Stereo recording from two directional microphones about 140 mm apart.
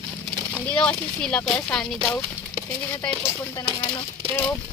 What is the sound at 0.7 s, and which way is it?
Speech, 10° left (ahead or behind).